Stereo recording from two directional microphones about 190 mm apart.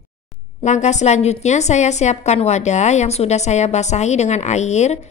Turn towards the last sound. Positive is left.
turn(degrees=35)  # may be behind; listen again after turning